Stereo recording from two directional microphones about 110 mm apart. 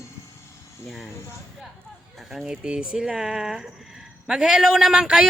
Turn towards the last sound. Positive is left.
turn(degrees=-5)  # may be behind; listen again after turning